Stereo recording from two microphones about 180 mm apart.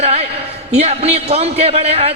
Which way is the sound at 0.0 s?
35° right (ahead or behind).